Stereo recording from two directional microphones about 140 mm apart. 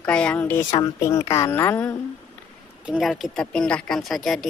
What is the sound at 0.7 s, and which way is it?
Speech, 25° left (ahead or behind).